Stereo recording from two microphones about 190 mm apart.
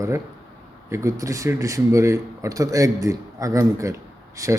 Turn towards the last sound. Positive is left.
turn(degrees=-15)  # may be behind; listen again after turning